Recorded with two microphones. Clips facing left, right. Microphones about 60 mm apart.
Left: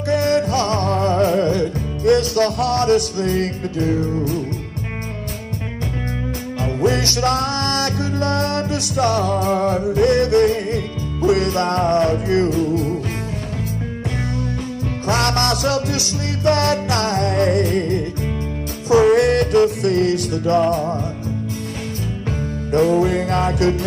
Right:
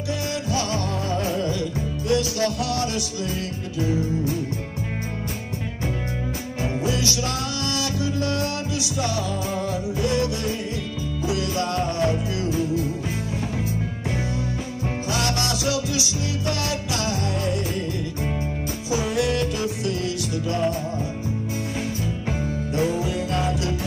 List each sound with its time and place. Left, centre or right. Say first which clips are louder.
0.1 s music: left 10 dB; left
6.6 s music: left 6 dB; left
15.0 s music: left 8 dB; left
18.9 s music: left 11 dB; left
22.7 s music: left 10 dB; left